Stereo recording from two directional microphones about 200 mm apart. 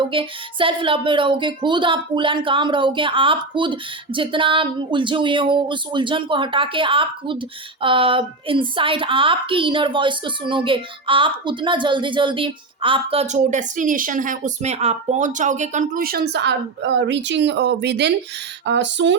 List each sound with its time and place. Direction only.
0.0 s speech: 25° right (ahead or behind); by 19.1 s 65° right (ahead or behind)